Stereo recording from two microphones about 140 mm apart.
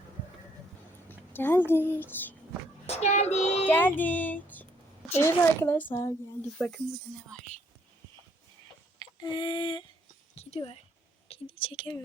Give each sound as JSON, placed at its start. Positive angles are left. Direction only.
{"t": 1.0, "sound": "speech", "side_deg": 15}
{"t": 2.8, "sound": "child singing", "side_deg": 50}
{"t": 3.7, "sound": "speech", "side_deg": 15}
{"t": 9.0, "sound": "a sound", "side_deg": 30}
{"t": 10.3, "sound": "a woman's voice", "side_deg": 45}